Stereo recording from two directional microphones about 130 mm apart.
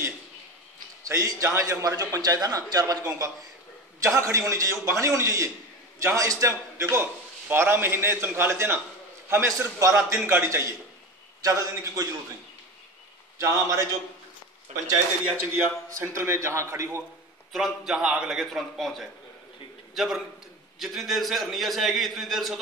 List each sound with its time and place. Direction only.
1.0 s a man's voice: 25° right (ahead or behind)
13.4 s a man's voice: 25° right (ahead or behind)
14.7 s a man's voice: 60° right (ahead or behind)
15.2 s a man's voice: 15° right (ahead or behind)
17.5 s a man's voice: centre (ahead or behind)